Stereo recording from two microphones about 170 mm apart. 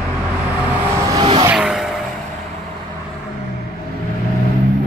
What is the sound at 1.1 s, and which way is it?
Vehicle, 30° right (ahead or behind).